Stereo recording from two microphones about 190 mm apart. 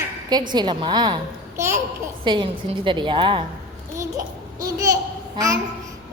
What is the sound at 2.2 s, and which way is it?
A woman's voice, 25° right (ahead or behind).